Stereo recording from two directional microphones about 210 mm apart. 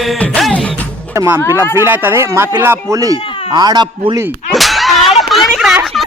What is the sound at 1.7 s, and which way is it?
A man's voice, 10° right (ahead or behind).